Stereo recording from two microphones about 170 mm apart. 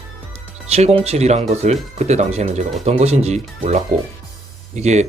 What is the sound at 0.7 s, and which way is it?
Speech, 40° right (ahead or behind).